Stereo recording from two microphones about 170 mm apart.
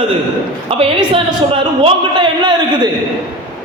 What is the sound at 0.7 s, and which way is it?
A man's voice, 35° right (ahead or behind).